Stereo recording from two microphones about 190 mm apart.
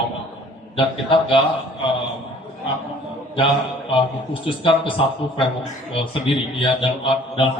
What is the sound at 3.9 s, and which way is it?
A man's voice, 25° left (ahead or behind).